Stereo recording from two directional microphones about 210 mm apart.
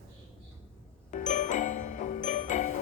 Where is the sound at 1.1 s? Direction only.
35° left (ahead or behind).